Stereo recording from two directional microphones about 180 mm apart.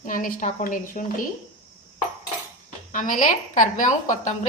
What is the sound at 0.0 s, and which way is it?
A woman's voice, 50° left (ahead or behind).